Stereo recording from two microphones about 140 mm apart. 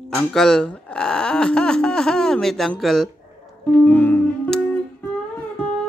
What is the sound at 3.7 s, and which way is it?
Music, 10° left (ahead or behind).